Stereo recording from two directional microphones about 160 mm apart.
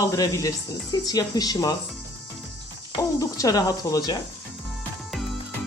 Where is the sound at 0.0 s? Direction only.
20° left (ahead or behind).